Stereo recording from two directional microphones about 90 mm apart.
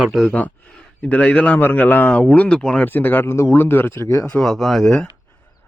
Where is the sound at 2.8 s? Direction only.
20° left (ahead or behind).